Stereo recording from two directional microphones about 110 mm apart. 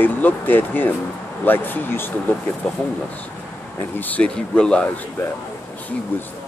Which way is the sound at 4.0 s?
15° left (ahead or behind).